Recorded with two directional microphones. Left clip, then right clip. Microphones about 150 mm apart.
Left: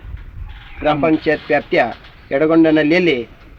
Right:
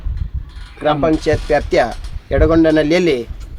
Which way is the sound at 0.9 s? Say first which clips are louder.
Even; 30° right (ahead or behind).